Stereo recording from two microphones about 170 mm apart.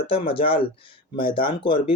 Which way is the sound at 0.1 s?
30° left (ahead or behind).